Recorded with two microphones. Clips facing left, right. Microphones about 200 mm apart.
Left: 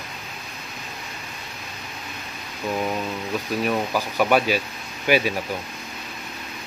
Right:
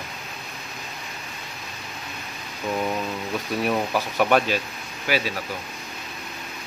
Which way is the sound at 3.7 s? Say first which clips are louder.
Right 1 dB; centre (ahead or behind).